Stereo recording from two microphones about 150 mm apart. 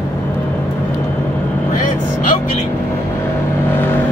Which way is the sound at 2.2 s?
55° left (ahead or behind).